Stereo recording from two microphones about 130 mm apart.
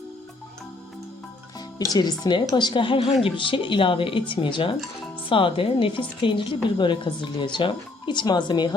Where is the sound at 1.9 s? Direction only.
30° left (ahead or behind).